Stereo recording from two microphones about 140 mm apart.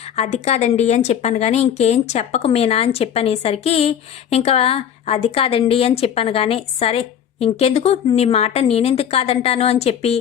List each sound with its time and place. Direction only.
0.2 s a woman's voice: 50° left (ahead or behind)